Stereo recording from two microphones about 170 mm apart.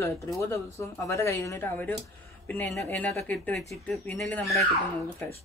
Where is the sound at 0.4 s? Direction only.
15° left (ahead or behind).